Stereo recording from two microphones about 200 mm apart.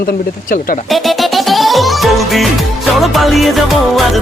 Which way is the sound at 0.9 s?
Centre (ahead or behind).